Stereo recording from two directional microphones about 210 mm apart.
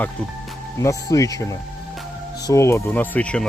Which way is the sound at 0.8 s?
15° left (ahead or behind).